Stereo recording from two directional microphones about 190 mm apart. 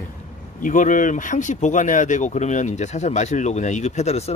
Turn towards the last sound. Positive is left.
turn(degrees=35)  # may be behind; listen again after turning